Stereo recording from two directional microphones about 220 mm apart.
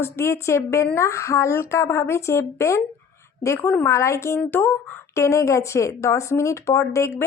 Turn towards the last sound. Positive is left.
turn(degrees=15)  # may be behind; listen again after turning